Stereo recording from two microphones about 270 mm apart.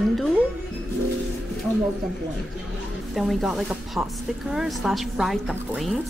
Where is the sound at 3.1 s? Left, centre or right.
Centre.